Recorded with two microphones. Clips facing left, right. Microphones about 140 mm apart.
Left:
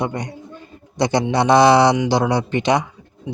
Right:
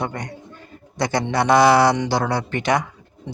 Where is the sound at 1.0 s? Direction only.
20° left (ahead or behind).